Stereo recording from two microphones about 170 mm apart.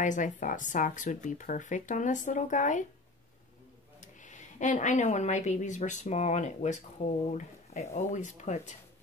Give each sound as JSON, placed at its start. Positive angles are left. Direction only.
{"t": 0.0, "sound": "speech", "side_deg": 50}
{"t": 4.0, "sound": "speech", "side_deg": 45}